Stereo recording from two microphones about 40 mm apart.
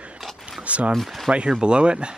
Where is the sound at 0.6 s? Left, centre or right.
Right.